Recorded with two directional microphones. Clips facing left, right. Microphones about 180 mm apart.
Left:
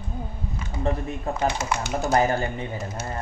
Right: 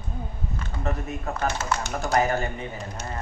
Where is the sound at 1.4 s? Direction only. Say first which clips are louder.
Left 2 dB; 10° left (ahead or behind).